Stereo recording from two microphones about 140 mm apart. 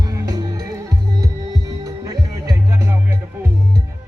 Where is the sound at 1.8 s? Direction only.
30° right (ahead or behind).